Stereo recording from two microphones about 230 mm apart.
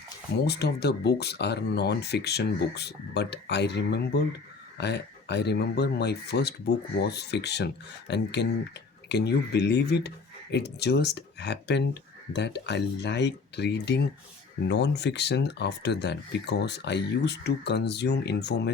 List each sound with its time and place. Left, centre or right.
0.4 s speech: left